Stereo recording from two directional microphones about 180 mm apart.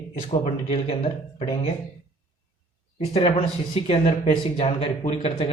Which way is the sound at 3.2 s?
30° left (ahead or behind).